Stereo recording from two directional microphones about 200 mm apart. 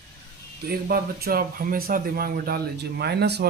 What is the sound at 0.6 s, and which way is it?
Speech, 50° right (ahead or behind).